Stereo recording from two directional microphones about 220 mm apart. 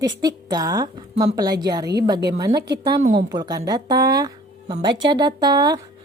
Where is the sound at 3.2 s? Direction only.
20° right (ahead or behind).